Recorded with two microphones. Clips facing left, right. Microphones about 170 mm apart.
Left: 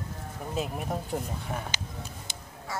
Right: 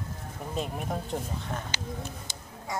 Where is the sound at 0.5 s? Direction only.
5° left (ahead or behind).